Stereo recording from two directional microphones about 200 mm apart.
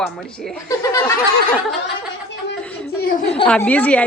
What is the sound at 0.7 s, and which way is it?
Speech, 15° left (ahead or behind).